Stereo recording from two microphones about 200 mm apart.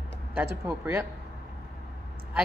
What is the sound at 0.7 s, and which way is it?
Speech, 15° right (ahead or behind).